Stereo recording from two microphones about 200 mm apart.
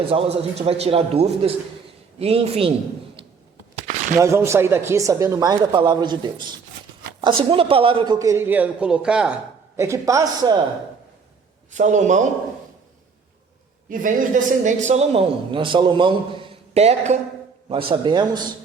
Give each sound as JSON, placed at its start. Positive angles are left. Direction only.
{"t": 0.1, "sound": "a man's voice", "side_deg": -30}
{"t": 4.1, "sound": "a man's voice", "side_deg": -15}
{"t": 11.7, "sound": "speech", "side_deg": -35}
{"t": 13.9, "sound": "a man's voice", "side_deg": -40}